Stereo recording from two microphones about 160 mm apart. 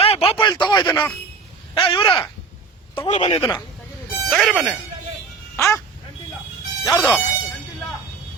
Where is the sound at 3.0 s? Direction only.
45° left (ahead or behind).